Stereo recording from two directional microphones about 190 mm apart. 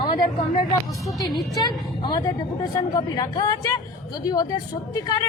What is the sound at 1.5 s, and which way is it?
Speech, 20° left (ahead or behind).